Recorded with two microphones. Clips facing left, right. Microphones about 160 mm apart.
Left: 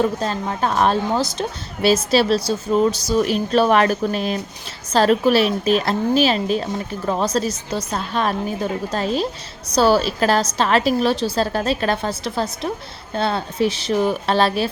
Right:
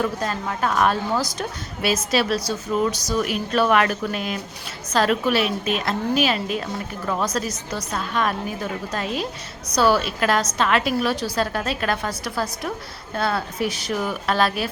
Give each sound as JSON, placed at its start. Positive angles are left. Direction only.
{"t": 0.0, "sound": "a woman's voice", "side_deg": 25}